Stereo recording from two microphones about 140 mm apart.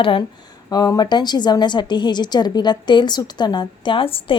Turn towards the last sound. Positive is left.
turn(degrees=40)  # may be behind; listen again after turning